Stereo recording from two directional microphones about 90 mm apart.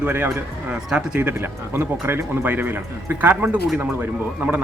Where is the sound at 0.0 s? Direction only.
20° right (ahead or behind).